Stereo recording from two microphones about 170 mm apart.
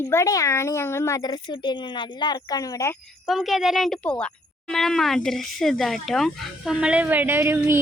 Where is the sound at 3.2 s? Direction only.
Centre (ahead or behind).